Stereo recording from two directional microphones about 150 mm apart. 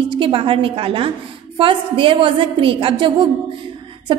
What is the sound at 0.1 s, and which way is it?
A woman's voice, 35° right (ahead or behind).